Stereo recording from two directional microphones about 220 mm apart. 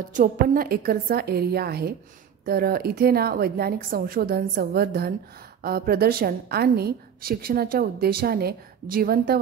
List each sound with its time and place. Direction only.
0.1 s a woman's voice: 35° right (ahead or behind)